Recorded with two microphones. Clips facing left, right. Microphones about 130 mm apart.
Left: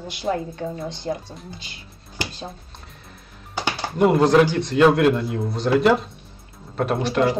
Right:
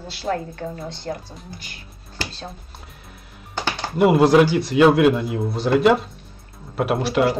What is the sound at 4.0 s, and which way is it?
Speech, 5° right (ahead or behind).